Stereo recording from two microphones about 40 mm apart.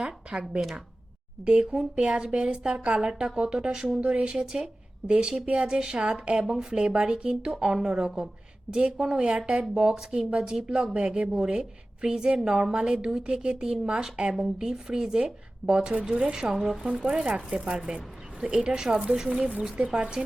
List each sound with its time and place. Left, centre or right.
0.0 s speech: right
16.5 s speech: centre
16.8 s speech: right
17.8 s zipper: centre
18.4 s speech: right